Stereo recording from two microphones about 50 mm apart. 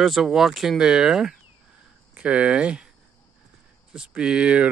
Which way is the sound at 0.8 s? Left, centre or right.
Centre.